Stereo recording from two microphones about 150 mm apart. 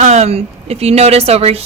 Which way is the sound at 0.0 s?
45° right (ahead or behind).